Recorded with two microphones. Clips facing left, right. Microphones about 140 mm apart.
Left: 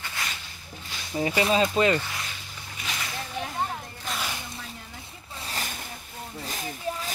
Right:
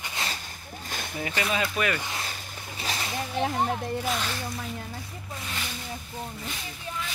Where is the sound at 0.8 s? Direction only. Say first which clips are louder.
Right 6 dB; 50° right (ahead or behind).